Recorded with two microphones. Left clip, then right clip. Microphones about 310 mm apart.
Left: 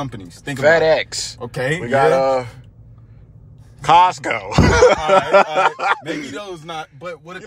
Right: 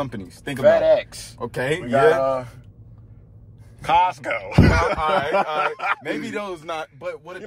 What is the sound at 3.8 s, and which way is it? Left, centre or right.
Speech, centre.